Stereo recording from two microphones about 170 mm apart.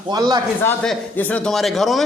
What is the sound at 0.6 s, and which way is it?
Speech, 5° left (ahead or behind).